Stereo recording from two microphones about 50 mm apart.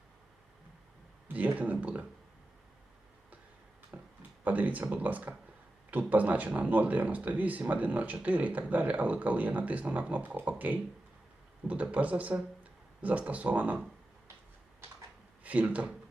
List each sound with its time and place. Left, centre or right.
1.5 s speech: right
3.9 s a sound: right
4.4 s speech: right
15.4 s speech: right